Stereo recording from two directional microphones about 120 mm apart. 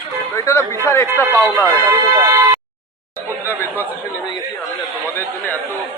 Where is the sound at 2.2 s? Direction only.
30° right (ahead or behind).